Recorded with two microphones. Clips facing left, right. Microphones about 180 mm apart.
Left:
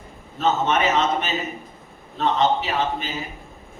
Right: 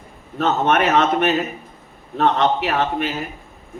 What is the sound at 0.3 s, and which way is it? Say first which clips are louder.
A man's voice: right 3 dB; 60° right (ahead or behind).